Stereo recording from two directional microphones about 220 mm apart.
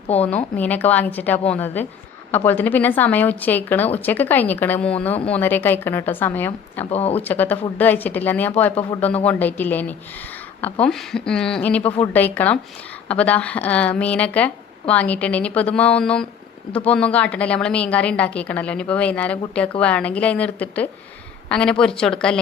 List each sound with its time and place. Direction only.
0.3 s a woman's voice: 5° left (ahead or behind)
6.9 s speech: 25° left (ahead or behind)
7.2 s a woman's voice: 10° left (ahead or behind)
8.7 s speech: 25° left (ahead or behind)
9.0 s a woman's voice: 5° left (ahead or behind)